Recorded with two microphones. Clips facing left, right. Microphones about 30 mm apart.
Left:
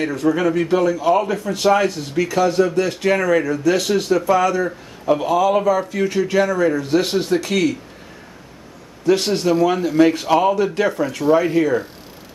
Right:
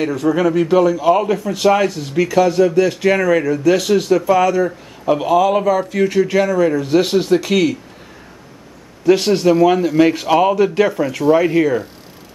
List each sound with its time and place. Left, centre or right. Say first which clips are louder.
0.0 s a man's voice: right 2 dB; centre
9.0 s a man's voice: right 4 dB; centre